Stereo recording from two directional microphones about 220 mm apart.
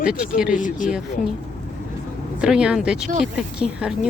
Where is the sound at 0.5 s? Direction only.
35° left (ahead or behind).